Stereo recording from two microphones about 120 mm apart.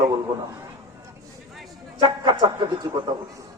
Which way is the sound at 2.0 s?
40° right (ahead or behind).